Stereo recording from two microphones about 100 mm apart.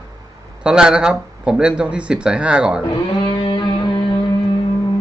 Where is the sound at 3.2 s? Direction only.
50° left (ahead or behind).